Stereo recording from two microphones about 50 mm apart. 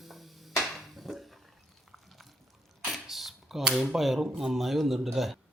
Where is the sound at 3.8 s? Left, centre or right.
Centre.